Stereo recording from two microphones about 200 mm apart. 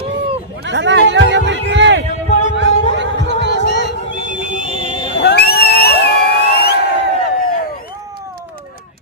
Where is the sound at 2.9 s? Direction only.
65° right (ahead or behind).